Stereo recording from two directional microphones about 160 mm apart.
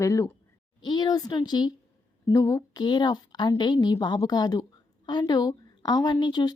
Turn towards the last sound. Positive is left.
turn(degrees=25)  # may be behind; listen again after turning